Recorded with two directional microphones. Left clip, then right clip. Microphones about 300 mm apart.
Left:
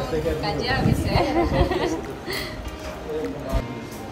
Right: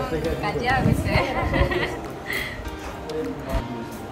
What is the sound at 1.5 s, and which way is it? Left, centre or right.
Speech, centre.